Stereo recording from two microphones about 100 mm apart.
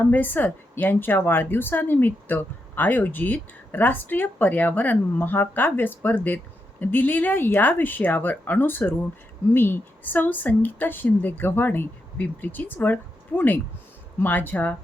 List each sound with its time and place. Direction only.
0.0 s speech: 20° left (ahead or behind)